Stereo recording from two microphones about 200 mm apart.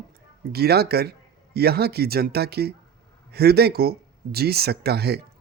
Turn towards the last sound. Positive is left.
turn(degrees=-55)  # may be behind; listen again after turning